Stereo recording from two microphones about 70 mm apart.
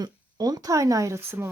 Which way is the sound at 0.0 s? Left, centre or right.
Right.